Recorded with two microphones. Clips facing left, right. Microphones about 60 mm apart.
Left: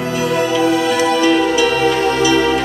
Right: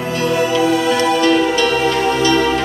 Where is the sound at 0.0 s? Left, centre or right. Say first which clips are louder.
Even; centre.